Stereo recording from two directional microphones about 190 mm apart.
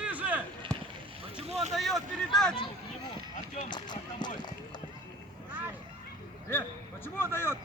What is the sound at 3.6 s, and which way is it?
Run, 25° left (ahead or behind).